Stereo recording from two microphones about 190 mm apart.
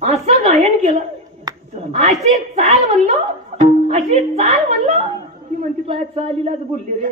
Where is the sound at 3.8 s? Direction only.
35° right (ahead or behind).